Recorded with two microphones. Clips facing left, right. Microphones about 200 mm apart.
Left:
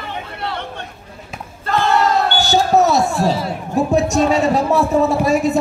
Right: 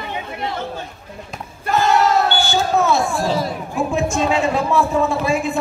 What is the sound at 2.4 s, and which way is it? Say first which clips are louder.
A man's voice: left 4 dB; 40° left (ahead or behind).